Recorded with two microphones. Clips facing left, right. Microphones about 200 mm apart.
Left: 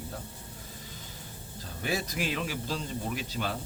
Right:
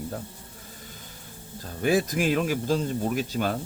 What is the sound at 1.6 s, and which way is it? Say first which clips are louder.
Speech: right 10 dB; 50° right (ahead or behind).